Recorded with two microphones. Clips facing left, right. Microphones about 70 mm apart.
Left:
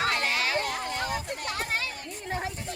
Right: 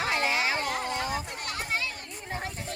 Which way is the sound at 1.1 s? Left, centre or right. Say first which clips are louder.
Left 1 dB; left.